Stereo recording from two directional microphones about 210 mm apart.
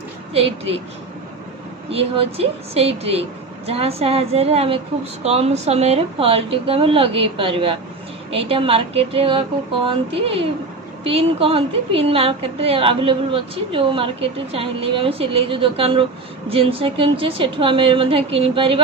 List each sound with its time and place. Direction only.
0.3 s a woman's voice: 30° right (ahead or behind)
1.9 s a woman's voice: 25° right (ahead or behind)